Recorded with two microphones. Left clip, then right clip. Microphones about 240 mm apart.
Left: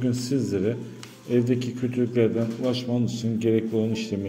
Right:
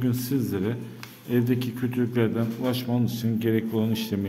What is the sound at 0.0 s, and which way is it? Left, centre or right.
A man's voice, centre.